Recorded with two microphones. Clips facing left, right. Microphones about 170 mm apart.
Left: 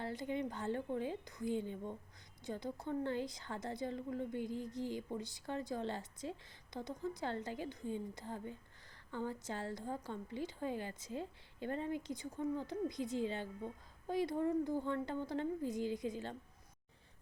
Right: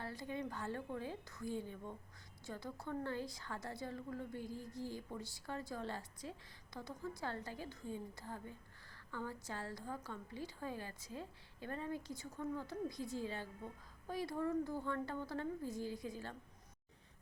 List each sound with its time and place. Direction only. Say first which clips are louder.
0.0 s a woman's voice: left 4 dB; 20° left (ahead or behind)